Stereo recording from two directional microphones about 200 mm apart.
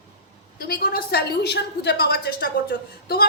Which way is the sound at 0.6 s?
50° left (ahead or behind).